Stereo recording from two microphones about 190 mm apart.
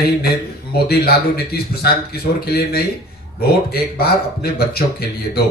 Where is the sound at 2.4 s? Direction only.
55° left (ahead or behind).